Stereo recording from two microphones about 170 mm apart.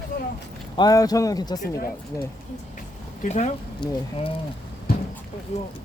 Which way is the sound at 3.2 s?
40° left (ahead or behind).